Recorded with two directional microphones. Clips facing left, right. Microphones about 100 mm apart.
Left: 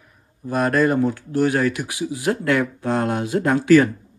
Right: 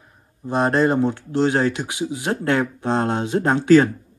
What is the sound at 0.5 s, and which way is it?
Speech, 25° right (ahead or behind).